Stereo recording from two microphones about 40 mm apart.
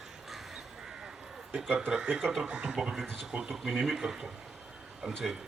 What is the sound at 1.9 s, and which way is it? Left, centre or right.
Speech, right.